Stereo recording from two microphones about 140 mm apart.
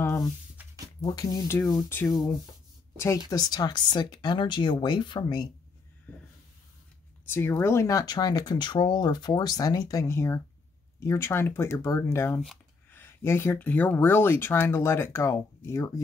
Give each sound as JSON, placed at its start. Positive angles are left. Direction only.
{"t": 0.6, "sound": "a sound", "side_deg": -10}
{"t": 1.0, "sound": "speech", "side_deg": 25}
{"t": 3.0, "sound": "speech", "side_deg": 20}
{"t": 7.2, "sound": "speech", "side_deg": 15}